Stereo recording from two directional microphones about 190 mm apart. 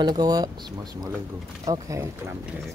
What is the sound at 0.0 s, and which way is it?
Speech, 20° right (ahead or behind).